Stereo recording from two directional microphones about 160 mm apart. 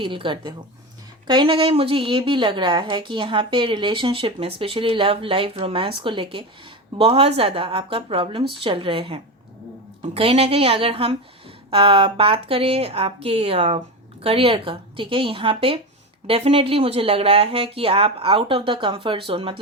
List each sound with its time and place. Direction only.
0.0 s a woman's voice: 30° right (ahead or behind)